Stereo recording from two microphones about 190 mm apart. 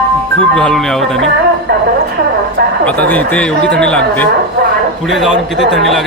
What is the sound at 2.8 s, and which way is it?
A man's voice, 10° left (ahead or behind).